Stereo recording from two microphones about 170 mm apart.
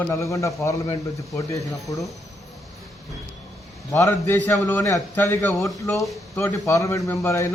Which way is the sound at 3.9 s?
15° left (ahead or behind).